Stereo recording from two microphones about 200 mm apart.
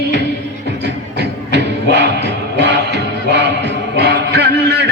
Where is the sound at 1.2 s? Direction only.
60° right (ahead or behind).